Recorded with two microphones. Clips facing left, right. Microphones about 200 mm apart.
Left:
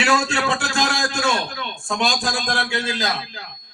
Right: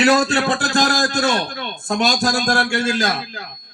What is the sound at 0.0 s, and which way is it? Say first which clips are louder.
Speech: right 5 dB; 35° right (ahead or behind).